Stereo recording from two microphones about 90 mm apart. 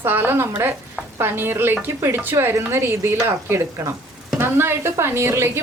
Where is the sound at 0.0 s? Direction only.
20° right (ahead or behind).